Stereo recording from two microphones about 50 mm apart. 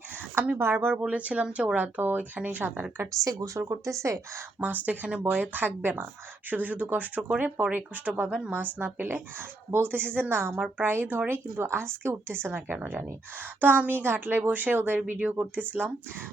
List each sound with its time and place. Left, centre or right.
0.2 s a sound: right
0.6 s speech: right
1.0 s speech: right
3.2 s speech: right
3.6 s speech: right
4.6 s speech: right
9.0 s speech: right
12.7 s speech: right